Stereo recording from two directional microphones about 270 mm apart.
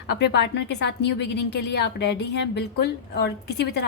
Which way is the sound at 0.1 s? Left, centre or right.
Left.